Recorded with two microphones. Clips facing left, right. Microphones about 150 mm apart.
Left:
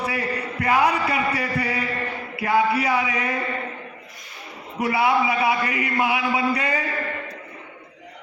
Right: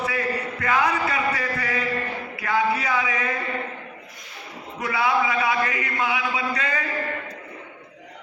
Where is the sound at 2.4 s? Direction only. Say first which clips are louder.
Left 3 dB; 30° left (ahead or behind).